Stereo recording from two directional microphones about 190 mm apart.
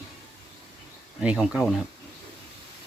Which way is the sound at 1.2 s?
5° right (ahead or behind).